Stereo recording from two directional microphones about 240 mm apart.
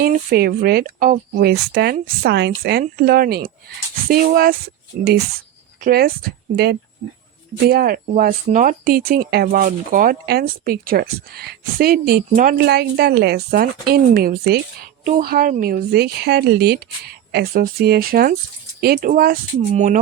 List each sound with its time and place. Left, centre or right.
0.0 s speech: right
5.8 s speech: right